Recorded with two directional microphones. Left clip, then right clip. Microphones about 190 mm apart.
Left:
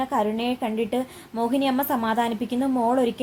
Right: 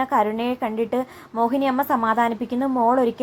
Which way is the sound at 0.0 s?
15° right (ahead or behind).